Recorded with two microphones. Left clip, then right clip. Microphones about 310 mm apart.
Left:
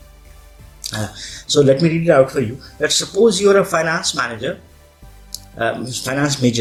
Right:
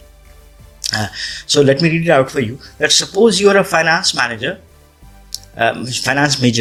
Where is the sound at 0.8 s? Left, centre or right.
Right.